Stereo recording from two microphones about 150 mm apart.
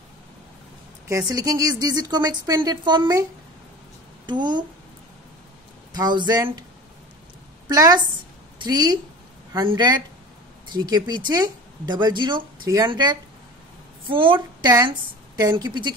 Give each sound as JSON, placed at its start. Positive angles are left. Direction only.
{"t": 1.0, "sound": "speech", "side_deg": -20}
{"t": 4.3, "sound": "a woman's voice", "side_deg": -30}
{"t": 5.9, "sound": "speech", "side_deg": -30}
{"t": 7.6, "sound": "a woman's voice", "side_deg": -25}